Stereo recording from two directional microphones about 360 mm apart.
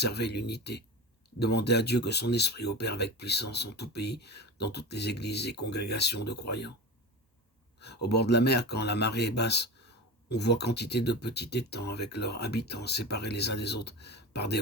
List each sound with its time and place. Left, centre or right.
0.0 s speech: left
8.1 s speech: left